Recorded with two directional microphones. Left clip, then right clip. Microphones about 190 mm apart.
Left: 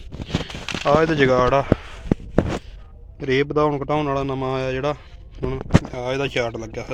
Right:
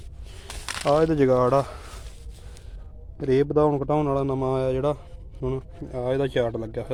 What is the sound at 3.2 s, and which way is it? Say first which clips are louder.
A man's voice: left 1 dB; 10° right (ahead or behind).